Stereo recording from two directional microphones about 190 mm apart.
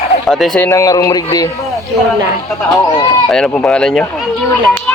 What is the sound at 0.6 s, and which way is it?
Speech, 15° left (ahead or behind).